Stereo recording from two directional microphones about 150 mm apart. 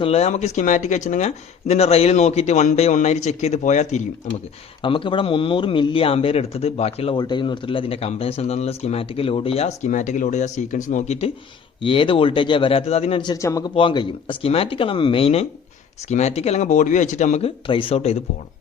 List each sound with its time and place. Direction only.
0.0 s speech: 45° left (ahead or behind)
4.8 s speech: 35° left (ahead or behind)
7.2 s speech: 30° left (ahead or behind); by 11.3 s 50° left (ahead or behind)
11.8 s speech: 35° left (ahead or behind)
13.3 s speech: 20° left (ahead or behind)
13.7 s speech: 35° left (ahead or behind); by 17.5 s 50° left (ahead or behind)
17.7 s speech: 35° left (ahead or behind)